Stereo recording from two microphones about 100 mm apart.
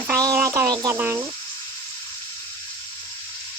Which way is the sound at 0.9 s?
20° right (ahead or behind).